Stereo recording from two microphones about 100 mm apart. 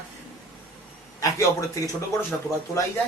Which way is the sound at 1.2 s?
35° left (ahead or behind).